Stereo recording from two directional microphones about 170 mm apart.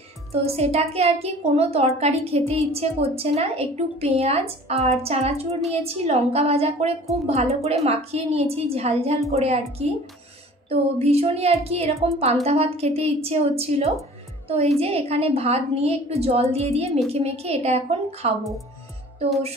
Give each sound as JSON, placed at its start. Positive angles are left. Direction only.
{"t": 0.3, "sound": "a woman's voice", "side_deg": -35}